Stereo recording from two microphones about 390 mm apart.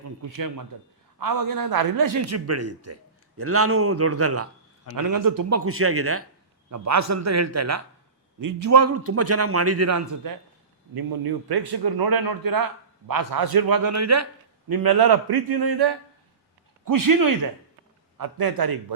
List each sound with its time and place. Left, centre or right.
0.0 s a man's voice: right
4.9 s a man's voice: right
5.5 s a man's voice: right
6.7 s a man's voice: right
8.4 s a man's voice: right
10.9 s a man's voice: right
14.7 s a man's voice: right
16.8 s a man's voice: right